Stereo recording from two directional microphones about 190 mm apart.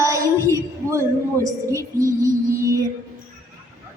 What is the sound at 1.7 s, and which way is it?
Music, 15° right (ahead or behind).